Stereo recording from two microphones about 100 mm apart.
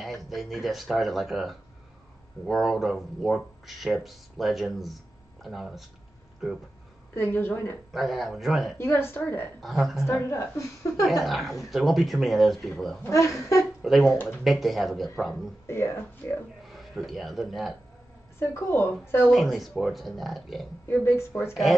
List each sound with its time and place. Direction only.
0.0 s speech: centre (ahead or behind)
7.2 s a woman's voice: 20° left (ahead or behind)
7.9 s speech: centre (ahead or behind)
8.7 s a woman's voice: 25° left (ahead or behind)
9.6 s speech: centre (ahead or behind)
10.0 s a woman's voice: 25° left (ahead or behind)
11.2 s speech: centre (ahead or behind)
13.0 s a woman's voice: 30° left (ahead or behind)
13.8 s speech: centre (ahead or behind)
15.6 s a woman's voice: 25° left (ahead or behind)
16.6 s speech: centre (ahead or behind)
18.4 s a woman's voice: 25° left (ahead or behind)
19.3 s speech: centre (ahead or behind)
20.9 s a woman's voice: 25° left (ahead or behind)